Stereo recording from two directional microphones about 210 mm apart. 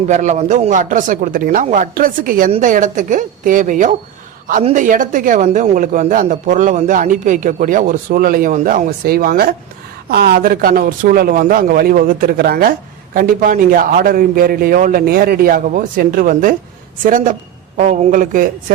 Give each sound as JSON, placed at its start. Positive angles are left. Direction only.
{"t": 0.1, "sound": "a man's voice", "side_deg": -35}